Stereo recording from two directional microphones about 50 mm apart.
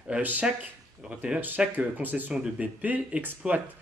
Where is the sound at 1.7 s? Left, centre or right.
Right.